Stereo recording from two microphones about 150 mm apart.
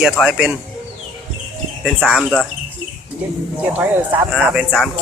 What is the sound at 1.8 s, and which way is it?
Speech, centre (ahead or behind).